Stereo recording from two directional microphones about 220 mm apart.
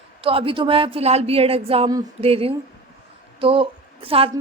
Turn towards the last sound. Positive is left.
turn(degrees=-25)  # may be behind; listen again after turning